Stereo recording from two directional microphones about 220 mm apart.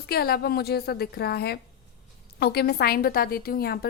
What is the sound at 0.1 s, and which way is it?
A woman's voice, 45° left (ahead or behind).